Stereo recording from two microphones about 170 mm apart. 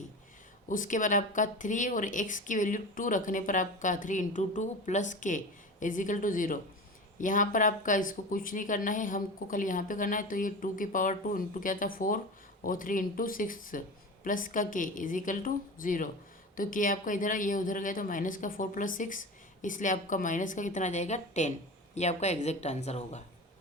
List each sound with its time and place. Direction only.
0.7 s a woman's voice: 50° left (ahead or behind)